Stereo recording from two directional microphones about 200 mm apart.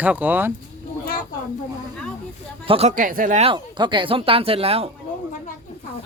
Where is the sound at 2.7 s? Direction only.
30° right (ahead or behind).